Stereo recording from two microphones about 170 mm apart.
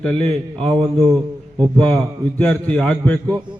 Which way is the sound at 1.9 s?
5° left (ahead or behind).